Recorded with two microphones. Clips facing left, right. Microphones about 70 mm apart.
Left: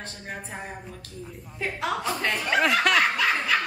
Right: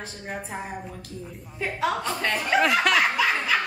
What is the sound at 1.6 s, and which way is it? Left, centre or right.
Chuckle, centre.